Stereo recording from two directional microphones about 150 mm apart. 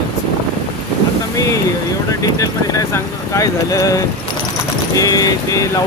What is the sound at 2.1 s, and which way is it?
Speech, 20° left (ahead or behind).